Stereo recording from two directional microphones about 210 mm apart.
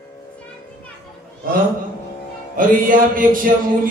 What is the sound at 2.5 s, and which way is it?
Music, 40° right (ahead or behind).